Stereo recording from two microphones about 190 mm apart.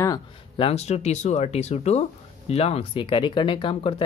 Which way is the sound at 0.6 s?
35° left (ahead or behind).